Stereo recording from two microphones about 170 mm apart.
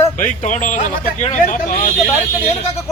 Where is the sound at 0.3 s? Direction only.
45° left (ahead or behind).